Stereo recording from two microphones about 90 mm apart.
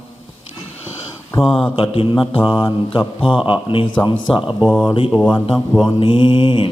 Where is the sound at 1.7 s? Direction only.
90° left.